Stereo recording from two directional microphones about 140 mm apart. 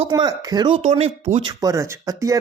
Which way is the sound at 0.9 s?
50° right (ahead or behind).